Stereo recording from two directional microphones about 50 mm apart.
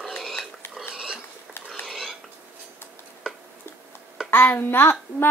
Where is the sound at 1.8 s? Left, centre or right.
Centre.